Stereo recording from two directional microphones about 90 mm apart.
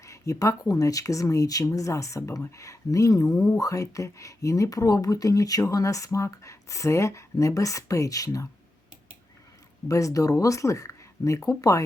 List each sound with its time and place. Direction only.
0.0 s speech: 35° left (ahead or behind)
3.2 s speech: 5° left (ahead or behind)
3.6 s speech: 40° left (ahead or behind)
9.9 s speech: 40° left (ahead or behind)